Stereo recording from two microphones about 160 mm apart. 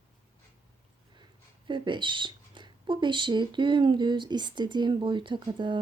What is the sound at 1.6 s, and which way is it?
A woman's voice, 30° right (ahead or behind).